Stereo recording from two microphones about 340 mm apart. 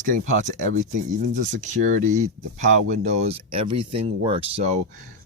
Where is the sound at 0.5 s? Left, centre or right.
Right.